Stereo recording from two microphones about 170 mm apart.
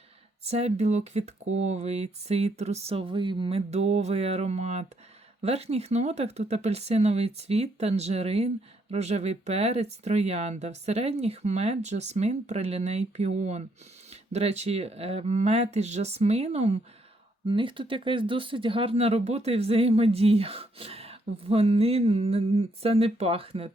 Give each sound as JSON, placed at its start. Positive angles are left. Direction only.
{"t": 0.4, "sound": "speech", "side_deg": -40}